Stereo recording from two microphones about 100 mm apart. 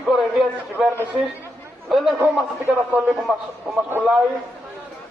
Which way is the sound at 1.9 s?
Centre (ahead or behind).